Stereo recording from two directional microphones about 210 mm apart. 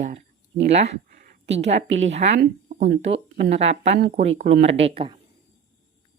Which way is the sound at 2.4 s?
35° right (ahead or behind).